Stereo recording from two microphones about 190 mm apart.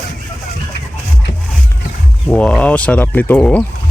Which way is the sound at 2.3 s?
5° left (ahead or behind).